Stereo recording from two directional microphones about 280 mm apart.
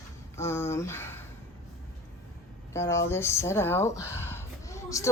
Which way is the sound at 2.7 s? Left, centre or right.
Centre.